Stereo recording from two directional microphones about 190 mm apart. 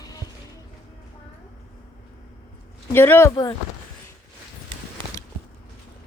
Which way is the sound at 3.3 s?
25° left (ahead or behind).